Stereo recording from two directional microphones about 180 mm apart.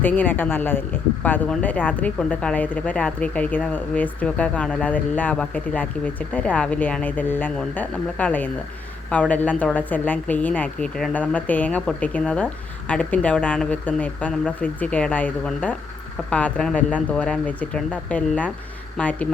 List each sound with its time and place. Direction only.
0.0 s speech: 10° left (ahead or behind)